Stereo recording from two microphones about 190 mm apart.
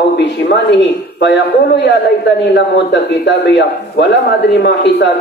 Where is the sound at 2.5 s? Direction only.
65° left (ahead or behind).